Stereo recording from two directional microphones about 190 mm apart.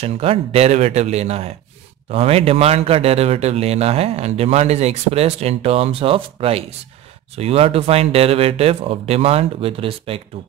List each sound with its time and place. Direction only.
0.0 s a man's voice: 30° right (ahead or behind)